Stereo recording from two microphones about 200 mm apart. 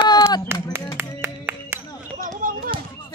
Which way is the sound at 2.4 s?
45° right (ahead or behind).